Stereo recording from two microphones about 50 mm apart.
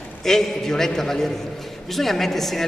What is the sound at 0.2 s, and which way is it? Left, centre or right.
A man's voice, centre.